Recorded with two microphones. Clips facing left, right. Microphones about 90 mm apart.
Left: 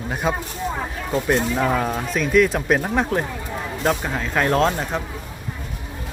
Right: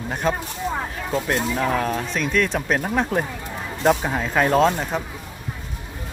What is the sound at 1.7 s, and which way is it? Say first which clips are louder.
Speech: left 1 dB; 10° left (ahead or behind).